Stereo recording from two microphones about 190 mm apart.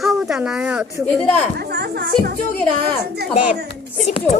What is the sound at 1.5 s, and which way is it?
Music, 55° right (ahead or behind).